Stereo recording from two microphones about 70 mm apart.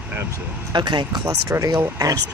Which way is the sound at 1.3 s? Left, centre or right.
Right.